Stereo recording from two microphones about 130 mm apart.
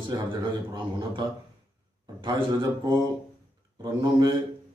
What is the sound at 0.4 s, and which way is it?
Speech, 35° right (ahead or behind).